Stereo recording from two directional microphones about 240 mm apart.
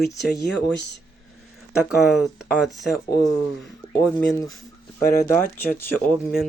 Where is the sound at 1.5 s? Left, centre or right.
Centre.